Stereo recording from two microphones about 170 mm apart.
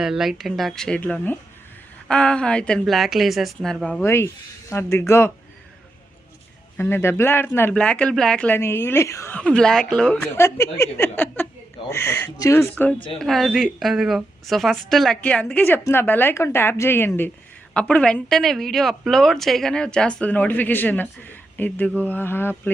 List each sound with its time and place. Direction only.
0.0 s a woman's voice: centre (ahead or behind); by 5.3 s 15° left (ahead or behind)
6.7 s a woman's voice: 15° left (ahead or behind)
10.2 s a woman's voice: 15° left (ahead or behind)